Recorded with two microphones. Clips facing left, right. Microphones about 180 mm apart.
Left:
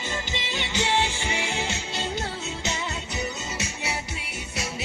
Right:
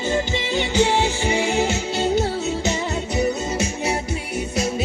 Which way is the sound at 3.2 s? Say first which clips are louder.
Right 11 dB; 30° right (ahead or behind).